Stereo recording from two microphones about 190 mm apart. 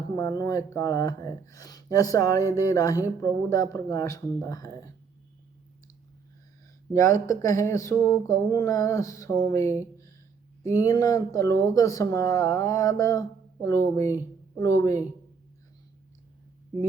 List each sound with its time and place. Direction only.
0.2 s speech: 15° left (ahead or behind)
6.9 s speech: 15° left (ahead or behind)
10.8 s speech: 20° left (ahead or behind)